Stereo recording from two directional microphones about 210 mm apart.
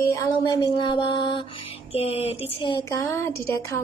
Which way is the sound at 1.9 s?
30° left (ahead or behind).